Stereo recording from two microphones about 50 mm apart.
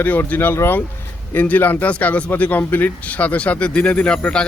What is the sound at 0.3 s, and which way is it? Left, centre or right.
Speech, left.